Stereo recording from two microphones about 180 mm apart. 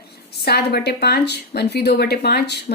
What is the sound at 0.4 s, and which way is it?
Speech, 65° left (ahead or behind).